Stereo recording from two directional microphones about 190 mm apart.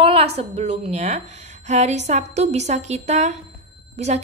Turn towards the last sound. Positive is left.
turn(degrees=-35)  # may be behind; listen again after turning